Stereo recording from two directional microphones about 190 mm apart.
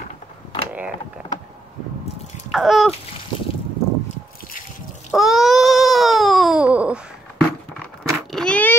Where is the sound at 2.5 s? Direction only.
Centre (ahead or behind).